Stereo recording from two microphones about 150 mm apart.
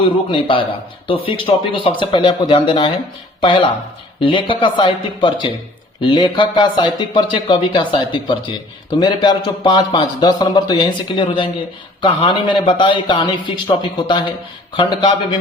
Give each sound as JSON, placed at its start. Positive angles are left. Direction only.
{"t": 0.0, "sound": "a man's voice", "side_deg": 35}